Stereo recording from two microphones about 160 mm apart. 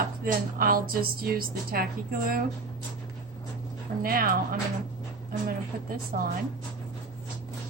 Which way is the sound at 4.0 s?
65° right (ahead or behind).